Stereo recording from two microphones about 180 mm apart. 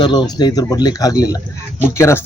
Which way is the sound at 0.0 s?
25° left (ahead or behind).